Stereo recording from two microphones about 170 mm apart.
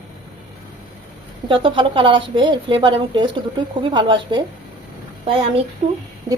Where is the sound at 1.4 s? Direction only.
30° right (ahead or behind).